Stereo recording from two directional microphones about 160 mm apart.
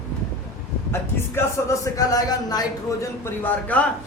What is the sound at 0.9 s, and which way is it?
A man's voice, 15° left (ahead or behind).